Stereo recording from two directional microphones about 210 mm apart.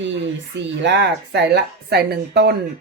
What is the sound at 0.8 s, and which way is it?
A woman's voice, 55° right (ahead or behind).